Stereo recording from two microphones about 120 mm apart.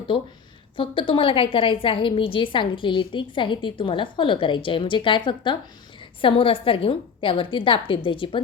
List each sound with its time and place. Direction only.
0.8 s a woman's voice: 45° left (ahead or behind)